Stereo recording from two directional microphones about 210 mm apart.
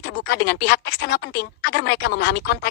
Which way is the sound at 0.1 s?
50° left (ahead or behind).